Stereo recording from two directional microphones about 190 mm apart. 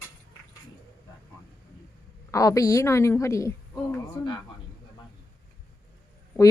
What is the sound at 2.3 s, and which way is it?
Speech, 15° left (ahead or behind).